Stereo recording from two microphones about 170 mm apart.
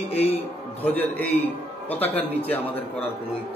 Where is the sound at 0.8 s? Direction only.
10° left (ahead or behind).